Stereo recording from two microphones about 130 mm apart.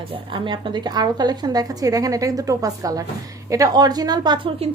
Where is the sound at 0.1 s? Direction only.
40° right (ahead or behind).